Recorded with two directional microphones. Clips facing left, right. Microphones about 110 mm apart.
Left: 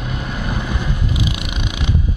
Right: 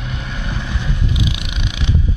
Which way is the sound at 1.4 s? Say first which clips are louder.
Left 2 dB; 5° left (ahead or behind).